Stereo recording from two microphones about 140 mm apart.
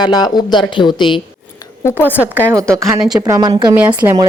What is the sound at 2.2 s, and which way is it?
A woman's voice, 15° right (ahead or behind).